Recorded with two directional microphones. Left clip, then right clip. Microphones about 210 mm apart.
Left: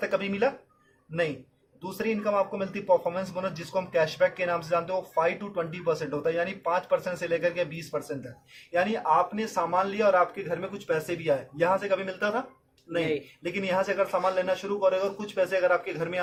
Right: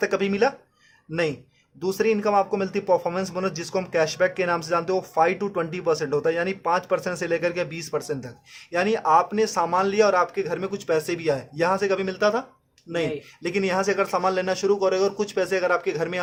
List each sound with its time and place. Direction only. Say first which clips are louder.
0.0 s speech: right 5 dB; 45° right (ahead or behind)
2.0 s speech: right 5 dB; 45° right (ahead or behind)